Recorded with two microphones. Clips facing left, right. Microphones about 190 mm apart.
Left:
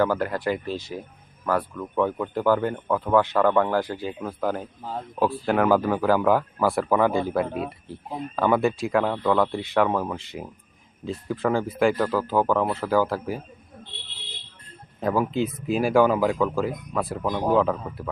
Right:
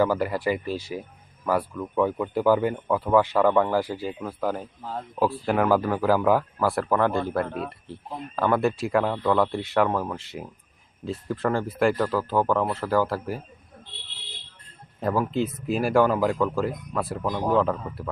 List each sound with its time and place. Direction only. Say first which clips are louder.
0.0 s speech: even; 5° right (ahead or behind)
4.8 s speech: left 1 dB; 10° left (ahead or behind)
5.2 s speech: left 1 dB; centre (ahead or behind)
15.0 s speech: left 1 dB; centre (ahead or behind)